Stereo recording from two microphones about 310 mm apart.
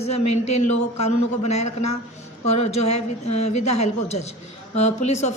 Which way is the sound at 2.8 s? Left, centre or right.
Left.